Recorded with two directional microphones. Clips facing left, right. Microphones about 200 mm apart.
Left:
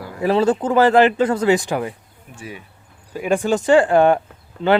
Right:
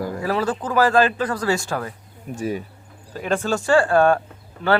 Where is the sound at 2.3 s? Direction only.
40° right (ahead or behind).